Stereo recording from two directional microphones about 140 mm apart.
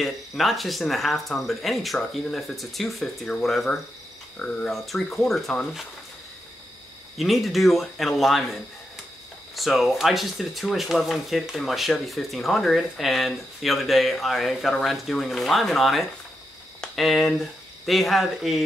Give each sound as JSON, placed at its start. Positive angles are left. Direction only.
{"t": 0.0, "sound": "speech", "side_deg": 0}
{"t": 7.2, "sound": "speech", "side_deg": 0}
{"t": 9.6, "sound": "speech", "side_deg": 0}